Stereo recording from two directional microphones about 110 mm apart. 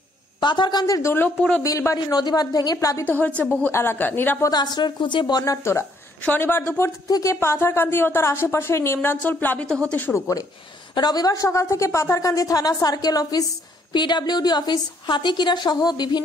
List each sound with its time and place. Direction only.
0.4 s speech: 45° left (ahead or behind); by 2.0 s 25° left (ahead or behind)
2.0 s speech: 40° left (ahead or behind)
3.1 s a woman's voice: 15° left (ahead or behind)
4.5 s speech: 40° left (ahead or behind); by 6.9 s 20° left (ahead or behind)
7.1 s speech: 35° left (ahead or behind)
7.3 s speech: 20° left (ahead or behind)
9.7 s a woman's voice: 5° left (ahead or behind)
9.9 s speech: 20° left (ahead or behind); by 16.2 s 40° left (ahead or behind)